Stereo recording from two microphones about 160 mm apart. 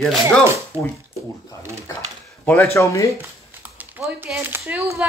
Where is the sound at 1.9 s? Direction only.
15° left (ahead or behind).